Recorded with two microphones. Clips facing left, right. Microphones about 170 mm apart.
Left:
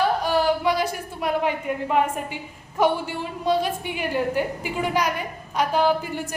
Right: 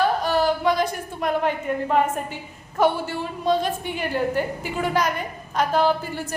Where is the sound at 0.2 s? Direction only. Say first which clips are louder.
Even; 10° left (ahead or behind).